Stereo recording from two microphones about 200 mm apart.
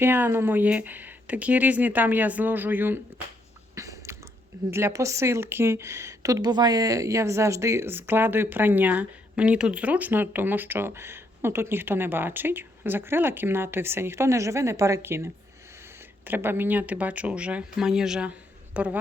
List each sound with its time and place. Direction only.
0.0 s speech: 10° right (ahead or behind)
3.8 s a sound: 15° right (ahead or behind)
4.7 s speech: 15° right (ahead or behind)